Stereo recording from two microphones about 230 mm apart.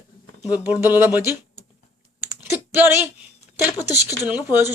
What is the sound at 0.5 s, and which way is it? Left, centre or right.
Speech, centre.